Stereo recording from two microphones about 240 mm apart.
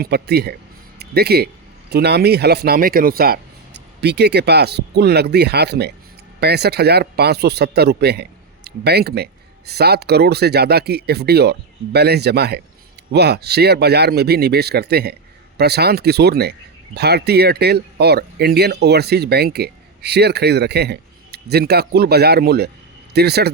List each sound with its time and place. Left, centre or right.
0.0 s speech: right